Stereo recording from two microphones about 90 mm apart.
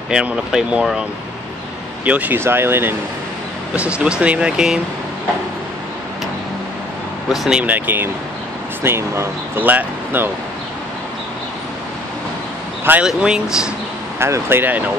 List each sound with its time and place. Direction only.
0.1 s speech: 10° right (ahead or behind)
2.0 s speech: 15° right (ahead or behind)
3.7 s speech: 15° right (ahead or behind)
7.2 s speech: 5° right (ahead or behind)
7.6 s speech: 20° right (ahead or behind)
13.0 s speech: 10° right (ahead or behind)
14.2 s speech: 25° right (ahead or behind)